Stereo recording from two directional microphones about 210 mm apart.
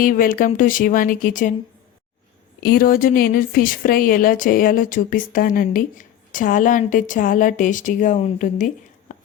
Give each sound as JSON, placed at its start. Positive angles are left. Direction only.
{"t": 0.0, "sound": "speech", "side_deg": 40}
{"t": 2.6, "sound": "speech", "side_deg": 45}